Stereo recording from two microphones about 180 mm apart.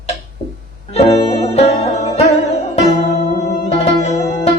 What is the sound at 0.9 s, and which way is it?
Music, 35° left (ahead or behind).